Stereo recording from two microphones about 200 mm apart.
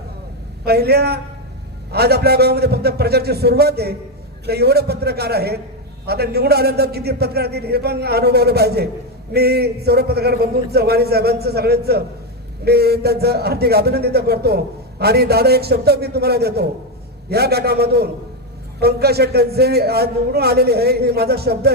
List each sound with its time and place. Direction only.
0.6 s speech: 50° right (ahead or behind)